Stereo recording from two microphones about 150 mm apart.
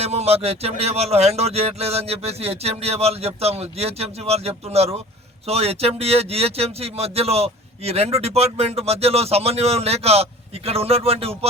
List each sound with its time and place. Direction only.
0.0 s speech: 45° right (ahead or behind)